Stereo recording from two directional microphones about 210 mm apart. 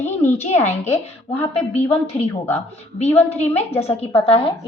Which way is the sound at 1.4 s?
30° left (ahead or behind).